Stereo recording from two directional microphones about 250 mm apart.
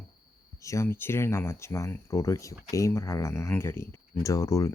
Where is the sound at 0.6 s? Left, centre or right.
Centre.